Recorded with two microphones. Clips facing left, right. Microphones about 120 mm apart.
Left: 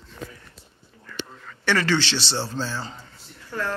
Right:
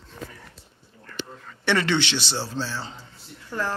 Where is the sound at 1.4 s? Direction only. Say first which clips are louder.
Left 1 dB; 25° right (ahead or behind); by 2.7 s 10° right (ahead or behind).